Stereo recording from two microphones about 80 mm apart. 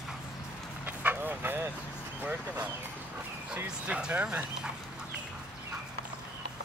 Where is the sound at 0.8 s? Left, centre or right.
Right.